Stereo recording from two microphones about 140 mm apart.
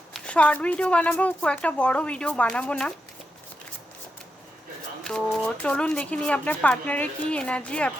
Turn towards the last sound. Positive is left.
turn(degrees=10)  # may be behind; listen again after turning